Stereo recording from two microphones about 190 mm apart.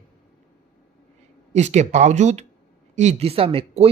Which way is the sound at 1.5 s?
35° right (ahead or behind).